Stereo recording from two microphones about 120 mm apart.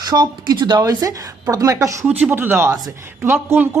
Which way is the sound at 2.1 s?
15° right (ahead or behind).